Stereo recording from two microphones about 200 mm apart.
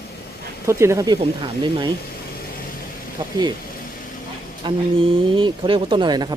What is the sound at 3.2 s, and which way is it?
Vehicle, 20° right (ahead or behind).